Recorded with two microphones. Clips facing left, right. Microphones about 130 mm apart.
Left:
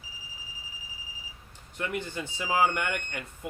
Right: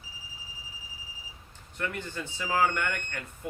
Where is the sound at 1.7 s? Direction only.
15° left (ahead or behind).